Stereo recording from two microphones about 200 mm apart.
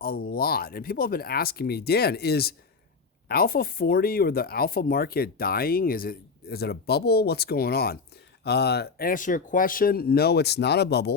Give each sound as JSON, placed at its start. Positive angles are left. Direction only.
{"t": 0.0, "sound": "speech", "side_deg": 50}